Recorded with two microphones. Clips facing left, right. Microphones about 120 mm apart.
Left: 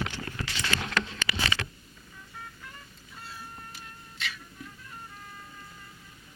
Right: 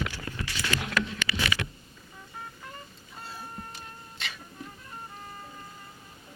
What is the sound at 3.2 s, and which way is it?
Cat, 30° right (ahead or behind).